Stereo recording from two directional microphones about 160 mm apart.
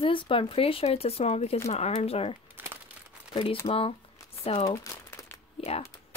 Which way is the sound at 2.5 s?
15° right (ahead or behind).